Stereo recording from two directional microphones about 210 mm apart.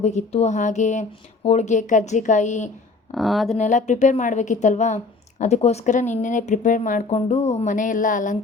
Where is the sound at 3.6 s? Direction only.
35° left (ahead or behind).